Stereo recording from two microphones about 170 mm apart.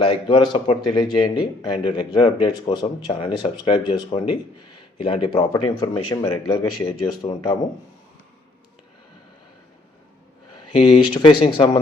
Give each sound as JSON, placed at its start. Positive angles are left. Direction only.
{"t": 0.0, "sound": "speech", "side_deg": 30}
{"t": 10.7, "sound": "speech", "side_deg": 30}